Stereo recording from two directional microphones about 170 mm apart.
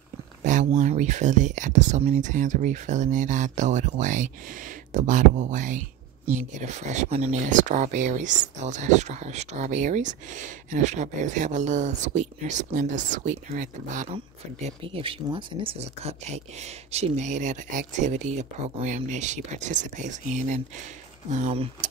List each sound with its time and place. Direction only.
0.4 s speech: 50° right (ahead or behind)
14.8 s speech: 30° right (ahead or behind)